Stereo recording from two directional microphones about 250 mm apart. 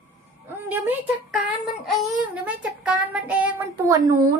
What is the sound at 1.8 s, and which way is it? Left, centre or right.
Child singing, centre.